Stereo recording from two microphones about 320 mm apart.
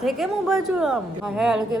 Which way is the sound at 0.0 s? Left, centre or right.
Centre.